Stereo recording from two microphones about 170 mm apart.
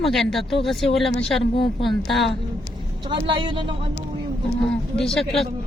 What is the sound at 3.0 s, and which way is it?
Speech, 30° right (ahead or behind).